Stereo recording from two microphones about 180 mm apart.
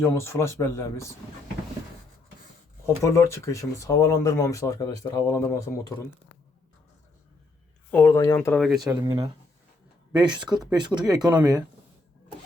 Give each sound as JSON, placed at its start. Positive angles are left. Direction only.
{"t": 0.0, "sound": "speech", "side_deg": 15}
{"t": 2.8, "sound": "speech", "side_deg": 15}
{"t": 7.9, "sound": "speech", "side_deg": 10}
{"t": 8.8, "sound": "speech", "side_deg": -20}